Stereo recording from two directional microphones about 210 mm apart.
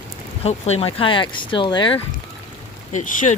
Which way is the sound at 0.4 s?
30° left (ahead or behind).